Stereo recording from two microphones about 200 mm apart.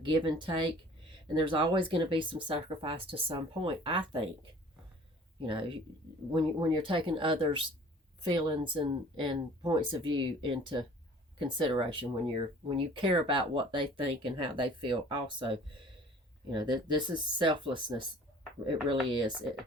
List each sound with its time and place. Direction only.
0.0 s speech: 25° right (ahead or behind)
5.4 s speech: 25° right (ahead or behind)